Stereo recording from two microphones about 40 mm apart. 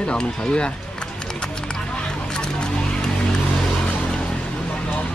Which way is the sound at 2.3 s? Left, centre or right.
Left.